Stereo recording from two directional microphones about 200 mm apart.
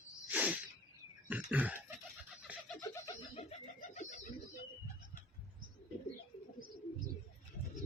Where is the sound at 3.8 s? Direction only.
35° left (ahead or behind).